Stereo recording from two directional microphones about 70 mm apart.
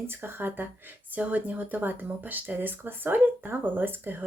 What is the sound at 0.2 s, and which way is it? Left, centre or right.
Speech, right.